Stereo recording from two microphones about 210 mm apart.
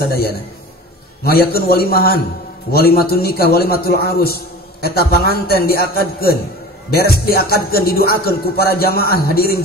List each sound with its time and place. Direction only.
1.2 s music: 45° left (ahead or behind)